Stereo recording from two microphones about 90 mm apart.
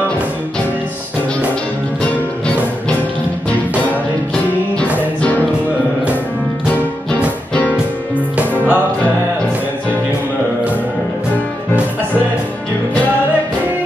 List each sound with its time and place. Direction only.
8.4 s music: 20° right (ahead or behind)